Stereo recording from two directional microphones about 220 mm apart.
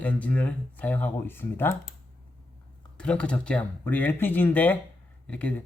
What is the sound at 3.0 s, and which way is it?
Speech, 5° left (ahead or behind).